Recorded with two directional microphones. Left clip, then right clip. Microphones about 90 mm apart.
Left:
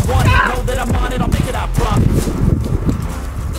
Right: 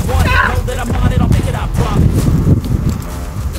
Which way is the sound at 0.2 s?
35° left (ahead or behind).